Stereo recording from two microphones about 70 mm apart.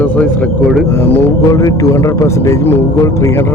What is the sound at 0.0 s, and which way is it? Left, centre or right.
Speech, centre.